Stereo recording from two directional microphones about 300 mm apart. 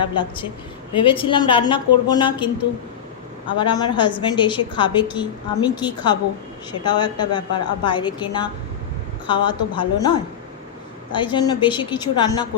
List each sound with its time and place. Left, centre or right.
0.1 s a woman's voice: centre
3.6 s a woman's voice: centre
11.1 s a woman's voice: centre